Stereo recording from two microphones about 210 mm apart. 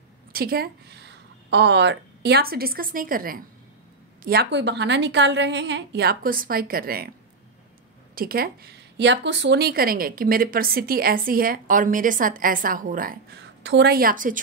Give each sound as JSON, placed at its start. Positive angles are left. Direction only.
{"t": 0.3, "sound": "a woman's voice", "side_deg": -45}
{"t": 8.1, "sound": "speech", "side_deg": -45}
{"t": 13.6, "sound": "speech", "side_deg": -55}